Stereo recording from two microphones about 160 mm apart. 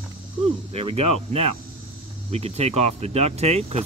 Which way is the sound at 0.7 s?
40° right (ahead or behind).